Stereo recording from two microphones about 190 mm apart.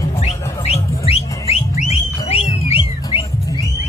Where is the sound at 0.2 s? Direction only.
30° left (ahead or behind).